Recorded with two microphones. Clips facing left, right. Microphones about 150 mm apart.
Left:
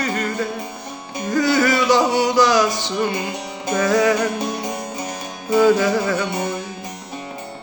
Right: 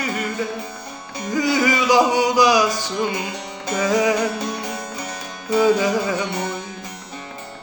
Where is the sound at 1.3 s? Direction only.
15° right (ahead or behind).